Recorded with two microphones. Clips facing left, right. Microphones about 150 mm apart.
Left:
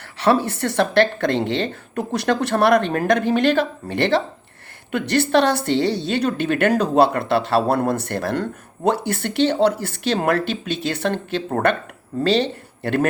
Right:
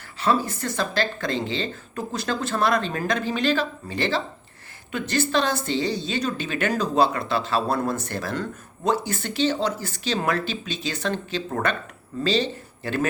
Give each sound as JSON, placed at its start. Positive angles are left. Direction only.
{"t": 0.2, "sound": "a woman's voice", "side_deg": 70}